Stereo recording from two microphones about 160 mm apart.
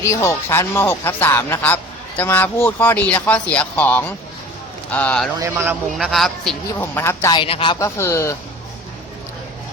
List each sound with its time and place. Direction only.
0.0 s speech: 20° left (ahead or behind)
5.4 s a man's voice: 15° right (ahead or behind)
6.0 s a man's voice: centre (ahead or behind)
6.7 s speech: 15° left (ahead or behind)
7.3 s speech: 35° left (ahead or behind)
7.8 s speech: 15° left (ahead or behind)